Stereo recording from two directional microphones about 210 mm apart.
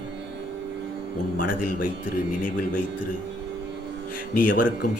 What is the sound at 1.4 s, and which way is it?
Speech, 40° left (ahead or behind).